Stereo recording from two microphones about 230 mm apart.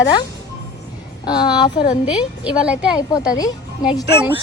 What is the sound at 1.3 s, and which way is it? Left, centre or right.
Speech, centre.